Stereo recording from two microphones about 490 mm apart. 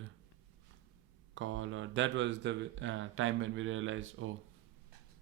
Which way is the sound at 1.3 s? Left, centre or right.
Right.